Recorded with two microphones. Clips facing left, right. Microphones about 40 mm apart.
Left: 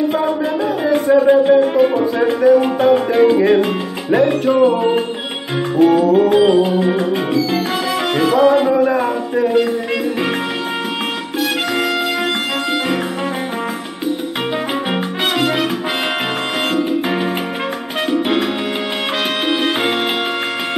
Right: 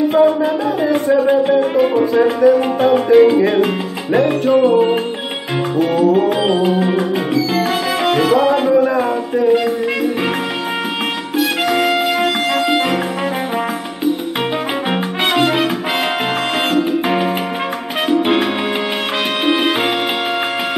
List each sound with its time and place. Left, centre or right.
0.1 s music: centre
5.8 s music: centre
11.8 s music: centre
15.2 s salsa music: centre